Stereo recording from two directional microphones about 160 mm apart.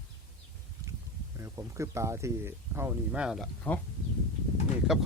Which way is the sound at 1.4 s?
20° right (ahead or behind).